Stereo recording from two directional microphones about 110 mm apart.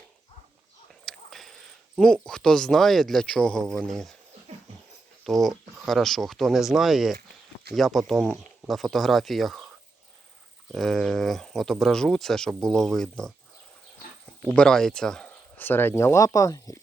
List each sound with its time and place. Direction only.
1.0 s a sound: centre (ahead or behind)
2.2 s speech: 5° left (ahead or behind)
5.2 s speech: centre (ahead or behind)
10.7 s speech: 5° left (ahead or behind)
14.5 s speech: 5° left (ahead or behind); by 16.8 s 30° left (ahead or behind)